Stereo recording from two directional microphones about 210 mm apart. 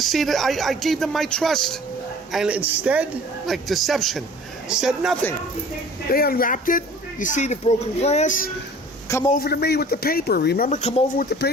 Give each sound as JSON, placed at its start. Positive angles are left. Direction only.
{"t": 0.0, "sound": "a man's voice", "side_deg": 0}
{"t": 6.1, "sound": "speech", "side_deg": 45}
{"t": 9.0, "sound": "a man's voice", "side_deg": 15}
{"t": 9.3, "sound": "speech", "side_deg": 50}
{"t": 10.7, "sound": "speech", "side_deg": 30}
{"t": 11.3, "sound": "speech", "side_deg": 50}